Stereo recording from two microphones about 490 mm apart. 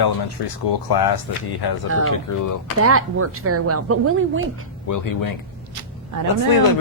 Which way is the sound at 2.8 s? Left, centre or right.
Right.